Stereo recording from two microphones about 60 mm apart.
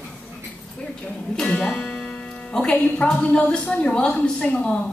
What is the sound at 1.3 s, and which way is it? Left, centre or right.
Speech, centre.